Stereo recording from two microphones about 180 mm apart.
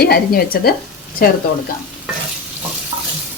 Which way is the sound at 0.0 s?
60° left (ahead or behind).